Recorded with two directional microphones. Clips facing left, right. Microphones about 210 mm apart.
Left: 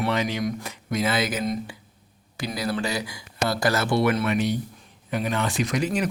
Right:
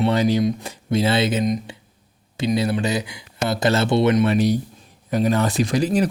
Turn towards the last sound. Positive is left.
turn(degrees=-35)  # may be behind; listen again after turning